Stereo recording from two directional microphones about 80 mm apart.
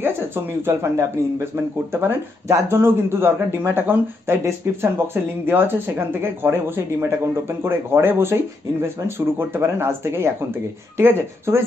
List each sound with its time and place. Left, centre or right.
0.0 s speech: right